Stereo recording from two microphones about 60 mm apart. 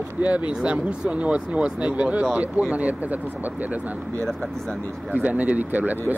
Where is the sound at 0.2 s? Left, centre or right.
Right.